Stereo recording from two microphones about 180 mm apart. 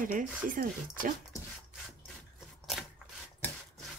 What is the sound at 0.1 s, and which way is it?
Speech, 50° right (ahead or behind).